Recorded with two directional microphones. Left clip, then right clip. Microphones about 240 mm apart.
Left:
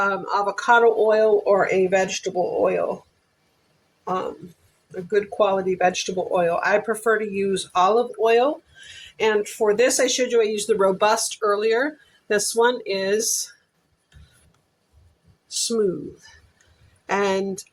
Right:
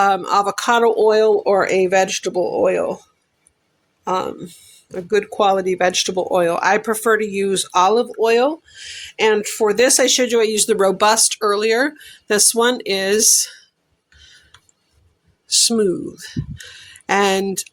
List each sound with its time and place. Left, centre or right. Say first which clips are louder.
0.0 s speech: right 6 dB; right
5.1 s speech: right 4 dB; right
15.4 s speech: right 6 dB; right